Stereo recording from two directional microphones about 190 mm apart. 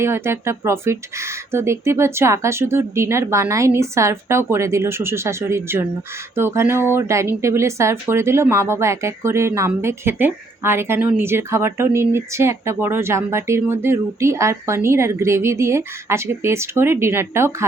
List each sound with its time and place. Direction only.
0.0 s speech: 15° right (ahead or behind)